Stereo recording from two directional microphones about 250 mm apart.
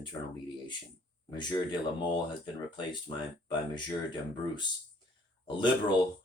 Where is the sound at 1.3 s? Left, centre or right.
Centre.